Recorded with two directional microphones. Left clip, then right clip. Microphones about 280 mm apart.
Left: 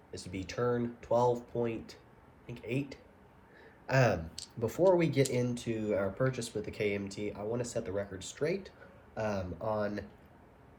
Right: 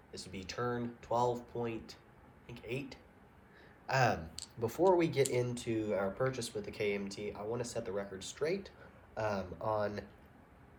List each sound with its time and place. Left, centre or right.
0.1 s speech: centre